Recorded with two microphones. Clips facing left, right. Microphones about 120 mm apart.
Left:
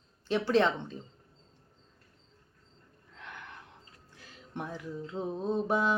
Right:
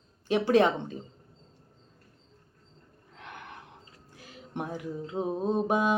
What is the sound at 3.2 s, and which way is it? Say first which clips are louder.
Gasp: right 2 dB; 55° right (ahead or behind).